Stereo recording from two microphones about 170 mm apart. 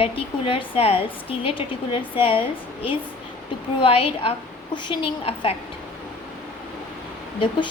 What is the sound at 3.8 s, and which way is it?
A woman's voice, 35° left (ahead or behind).